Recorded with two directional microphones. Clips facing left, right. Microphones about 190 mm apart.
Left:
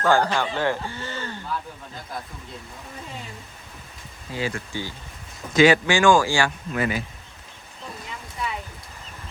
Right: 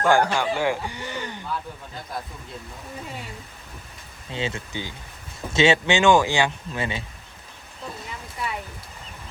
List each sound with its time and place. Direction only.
0.0 s speech: 15° right (ahead or behind)
4.3 s speech: 25° right (ahead or behind)